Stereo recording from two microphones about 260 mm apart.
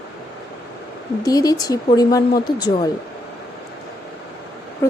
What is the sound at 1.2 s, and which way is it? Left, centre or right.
A woman's voice, centre.